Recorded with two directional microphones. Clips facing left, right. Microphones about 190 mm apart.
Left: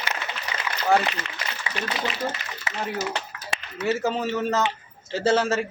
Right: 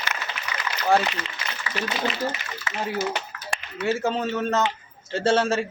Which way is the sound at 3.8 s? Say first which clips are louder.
Even; 5° left (ahead or behind).